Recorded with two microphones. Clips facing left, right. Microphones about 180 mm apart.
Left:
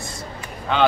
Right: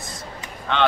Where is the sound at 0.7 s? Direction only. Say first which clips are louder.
Left 2 dB; 5° left (ahead or behind).